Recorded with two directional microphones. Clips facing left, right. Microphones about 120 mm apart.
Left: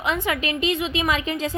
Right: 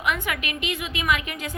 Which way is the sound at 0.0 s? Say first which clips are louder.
Left 3 dB; 30° left (ahead or behind).